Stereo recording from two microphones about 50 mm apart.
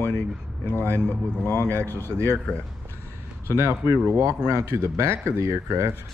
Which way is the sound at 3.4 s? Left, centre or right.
Right.